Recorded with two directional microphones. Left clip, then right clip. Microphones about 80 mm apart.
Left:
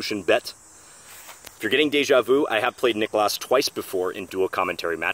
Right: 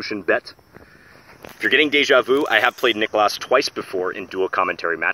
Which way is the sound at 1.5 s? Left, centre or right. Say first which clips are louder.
Right 5 dB; left.